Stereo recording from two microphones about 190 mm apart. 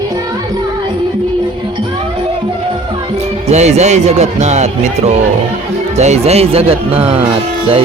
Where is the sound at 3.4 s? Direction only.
35° right (ahead or behind).